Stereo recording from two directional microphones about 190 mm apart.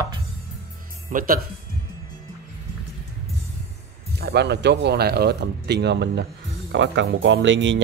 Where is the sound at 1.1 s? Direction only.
45° right (ahead or behind).